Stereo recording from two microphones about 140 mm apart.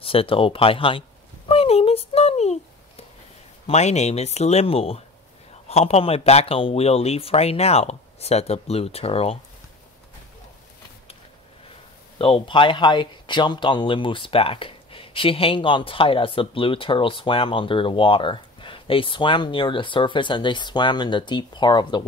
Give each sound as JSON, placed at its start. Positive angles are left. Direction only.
{"t": 0.0, "sound": "speech", "side_deg": 40}
{"t": 1.5, "sound": "a sound", "side_deg": 45}
{"t": 3.6, "sound": "speech", "side_deg": 50}
{"t": 12.2, "sound": "speech", "side_deg": 40}